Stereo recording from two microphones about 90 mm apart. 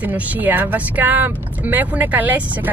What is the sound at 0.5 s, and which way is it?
Speech, 20° right (ahead or behind).